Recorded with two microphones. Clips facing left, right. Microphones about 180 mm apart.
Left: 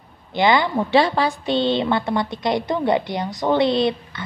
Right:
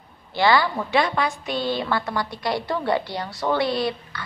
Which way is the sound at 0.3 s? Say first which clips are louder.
Left 2 dB; 20° left (ahead or behind).